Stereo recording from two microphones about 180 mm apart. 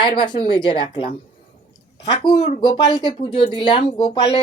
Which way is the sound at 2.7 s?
25° left (ahead or behind).